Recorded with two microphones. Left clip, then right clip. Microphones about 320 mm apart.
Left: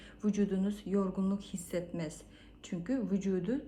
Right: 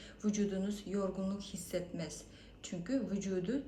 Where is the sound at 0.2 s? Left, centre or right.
Centre.